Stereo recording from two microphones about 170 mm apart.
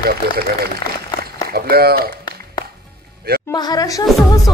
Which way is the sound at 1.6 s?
65° right (ahead or behind).